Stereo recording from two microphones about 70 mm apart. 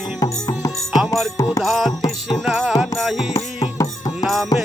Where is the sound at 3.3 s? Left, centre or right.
Left.